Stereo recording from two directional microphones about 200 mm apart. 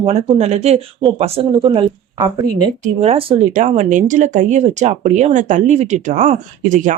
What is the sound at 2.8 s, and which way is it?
Speech, 30° right (ahead or behind).